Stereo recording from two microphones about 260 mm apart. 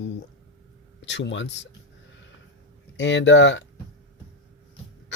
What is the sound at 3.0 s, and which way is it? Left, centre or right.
Speech, left.